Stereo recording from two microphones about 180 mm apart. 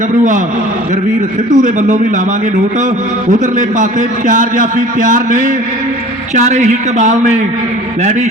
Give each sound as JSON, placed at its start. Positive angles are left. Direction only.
{"t": 1.5, "sound": "a man's voice", "side_deg": -45}
{"t": 3.3, "sound": "a man's voice", "side_deg": -45}